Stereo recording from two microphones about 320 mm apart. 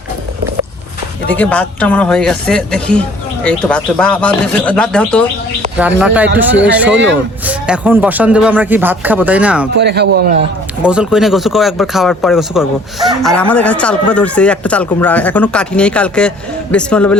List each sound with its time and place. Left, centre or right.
1.3 s speech: centre
9.7 s speech: right
10.8 s speech: centre